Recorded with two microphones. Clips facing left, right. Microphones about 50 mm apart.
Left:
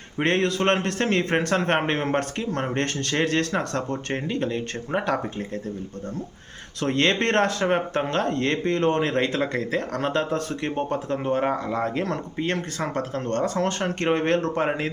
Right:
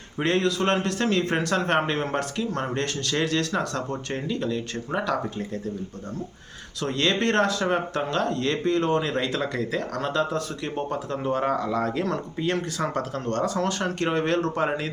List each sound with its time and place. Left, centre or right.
0.2 s speech: left
6.7 s speech: left